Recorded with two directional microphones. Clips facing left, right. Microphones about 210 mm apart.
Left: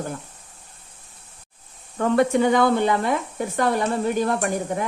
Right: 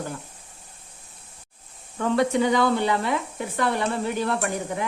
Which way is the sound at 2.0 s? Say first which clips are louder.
Left 3 dB; 50° left (ahead or behind).